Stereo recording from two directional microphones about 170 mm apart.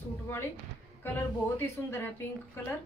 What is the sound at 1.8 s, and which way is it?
A woman's voice, 15° left (ahead or behind).